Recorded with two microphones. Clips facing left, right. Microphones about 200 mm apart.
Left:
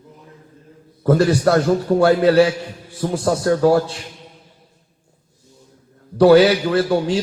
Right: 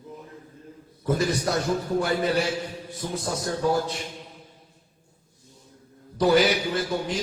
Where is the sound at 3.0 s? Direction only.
90° left.